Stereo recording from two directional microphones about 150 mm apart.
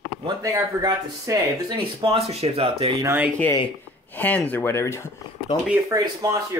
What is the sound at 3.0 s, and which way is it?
Speech, 10° right (ahead or behind).